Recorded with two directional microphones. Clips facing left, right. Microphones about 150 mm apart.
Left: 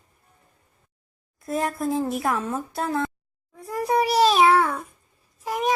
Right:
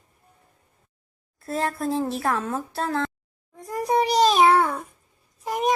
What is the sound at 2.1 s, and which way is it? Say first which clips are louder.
Speech: even; 15° left (ahead or behind).